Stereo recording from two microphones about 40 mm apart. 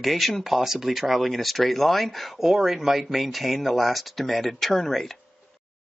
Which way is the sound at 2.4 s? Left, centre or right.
Centre.